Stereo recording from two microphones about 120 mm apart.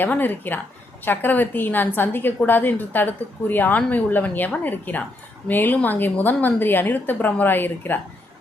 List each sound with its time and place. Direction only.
0.0 s a woman's voice: 15° left (ahead or behind)